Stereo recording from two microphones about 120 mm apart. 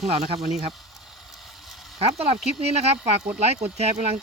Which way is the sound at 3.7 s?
60° right (ahead or behind).